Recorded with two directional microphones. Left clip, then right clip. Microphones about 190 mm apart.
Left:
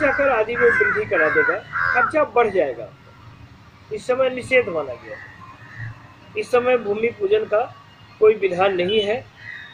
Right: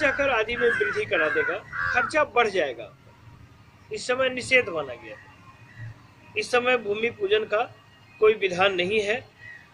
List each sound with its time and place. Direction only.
0.0 s speech: 10° right (ahead or behind)
0.6 s speech: 45° right (ahead or behind)
2.1 s speech: 5° right (ahead or behind)
3.9 s speech: 5° right (ahead or behind)
6.3 s speech: 5° right (ahead or behind)